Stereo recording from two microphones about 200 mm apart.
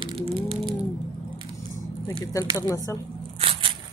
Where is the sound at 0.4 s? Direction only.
25° right (ahead or behind).